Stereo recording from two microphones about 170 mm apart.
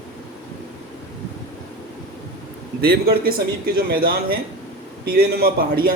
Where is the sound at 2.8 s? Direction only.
60° right (ahead or behind).